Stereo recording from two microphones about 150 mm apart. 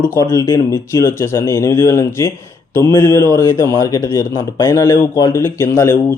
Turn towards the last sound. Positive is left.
turn(degrees=20)  # may be behind; listen again after turning